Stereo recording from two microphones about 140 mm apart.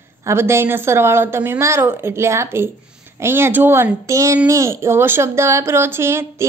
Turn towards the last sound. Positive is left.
turn(degrees=-20)  # may be behind; listen again after turning